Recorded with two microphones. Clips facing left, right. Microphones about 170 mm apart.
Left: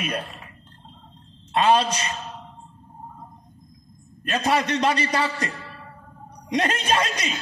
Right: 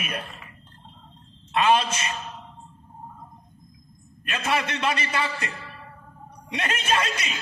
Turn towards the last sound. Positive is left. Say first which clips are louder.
# left 2 dB
turn(degrees=35)  # may be behind; listen again after turning